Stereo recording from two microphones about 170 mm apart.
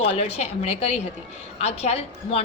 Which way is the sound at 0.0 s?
35° left (ahead or behind).